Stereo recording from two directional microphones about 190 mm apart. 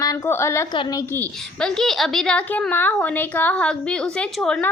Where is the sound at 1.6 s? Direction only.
5° left (ahead or behind).